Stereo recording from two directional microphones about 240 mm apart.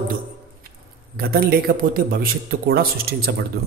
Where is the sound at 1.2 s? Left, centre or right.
Right.